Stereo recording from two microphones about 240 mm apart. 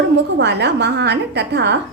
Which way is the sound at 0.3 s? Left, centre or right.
Right.